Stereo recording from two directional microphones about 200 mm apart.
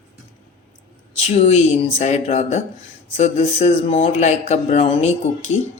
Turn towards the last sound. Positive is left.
turn(degrees=35)  # may be behind; listen again after turning